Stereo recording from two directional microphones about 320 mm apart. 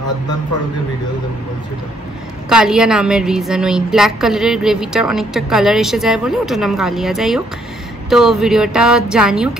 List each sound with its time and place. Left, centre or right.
2.5 s a woman's voice: centre